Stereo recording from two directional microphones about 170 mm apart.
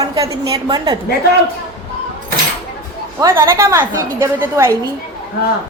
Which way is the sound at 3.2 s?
15° right (ahead or behind).